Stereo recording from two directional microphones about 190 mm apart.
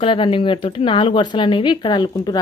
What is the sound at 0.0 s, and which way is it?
A woman's voice, 30° left (ahead or behind).